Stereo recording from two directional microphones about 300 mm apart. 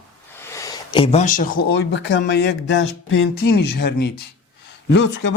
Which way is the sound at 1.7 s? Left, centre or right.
Left.